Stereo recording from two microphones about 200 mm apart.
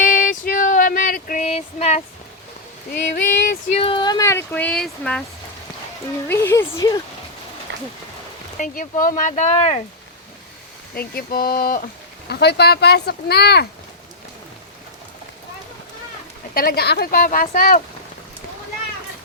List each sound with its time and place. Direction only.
0.0 s female singing: 45° left (ahead or behind)
3.4 s a sound: 45° left (ahead or behind)
3.8 s speech: 25° left (ahead or behind); by 5.2 s 5° left (ahead or behind)
6.2 s speech: 10° left (ahead or behind)
7.7 s a sound: 60° right (ahead or behind)
8.5 s speech: 40° left (ahead or behind)
10.9 s speech: 50° left (ahead or behind)
16.6 s speech: 50° left (ahead or behind)